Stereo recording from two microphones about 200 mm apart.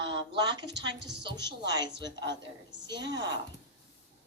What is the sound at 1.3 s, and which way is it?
A woman's voice, 60° right (ahead or behind).